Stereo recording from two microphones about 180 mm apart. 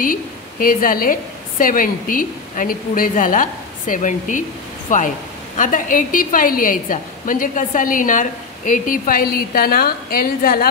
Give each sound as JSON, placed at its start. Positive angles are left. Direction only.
{"t": 0.0, "sound": "a woman's voice", "side_deg": 50}